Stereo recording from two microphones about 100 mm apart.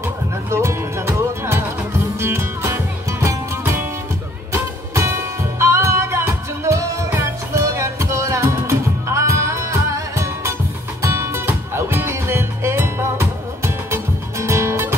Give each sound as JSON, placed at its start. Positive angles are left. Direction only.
{"t": 0.5, "sound": "music", "side_deg": -30}